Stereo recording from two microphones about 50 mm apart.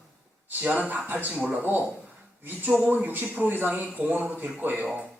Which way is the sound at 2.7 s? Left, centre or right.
Right.